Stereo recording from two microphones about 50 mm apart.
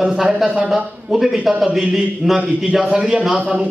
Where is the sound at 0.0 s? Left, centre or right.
Centre.